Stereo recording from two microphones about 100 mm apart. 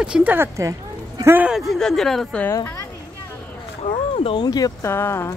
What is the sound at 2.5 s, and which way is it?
Speech, 30° left (ahead or behind).